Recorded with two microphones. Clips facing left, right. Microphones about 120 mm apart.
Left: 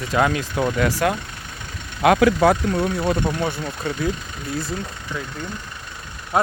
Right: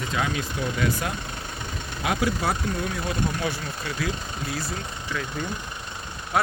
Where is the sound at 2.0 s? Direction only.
80° left.